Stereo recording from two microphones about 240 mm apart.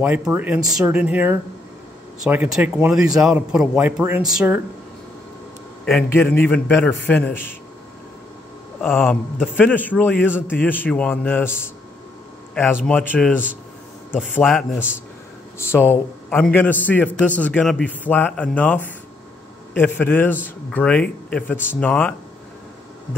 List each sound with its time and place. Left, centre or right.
0.0 s a man's voice: centre
5.9 s a man's voice: centre
8.8 s a man's voice: centre
12.8 s a man's voice: centre
14.4 s a man's voice: centre